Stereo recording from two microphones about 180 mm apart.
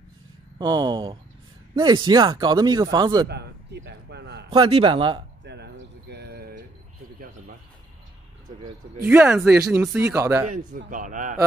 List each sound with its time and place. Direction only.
0.6 s speech: 25° right (ahead or behind)
3.3 s a sound: 70° right (ahead or behind)
4.5 s speech: 30° right (ahead or behind)
5.4 s a sound: 70° right (ahead or behind)
9.0 s speech: 10° right (ahead or behind)
10.9 s a man's voice: 45° right (ahead or behind)